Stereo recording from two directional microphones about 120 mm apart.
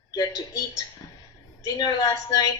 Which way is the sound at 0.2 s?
30° left (ahead or behind).